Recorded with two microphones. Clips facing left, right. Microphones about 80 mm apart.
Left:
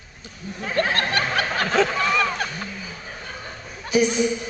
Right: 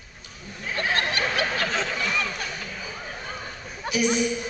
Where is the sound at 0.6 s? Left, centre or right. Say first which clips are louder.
Left 4 dB; left.